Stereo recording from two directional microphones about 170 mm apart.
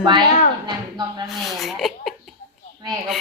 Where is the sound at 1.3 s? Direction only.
Centre (ahead or behind).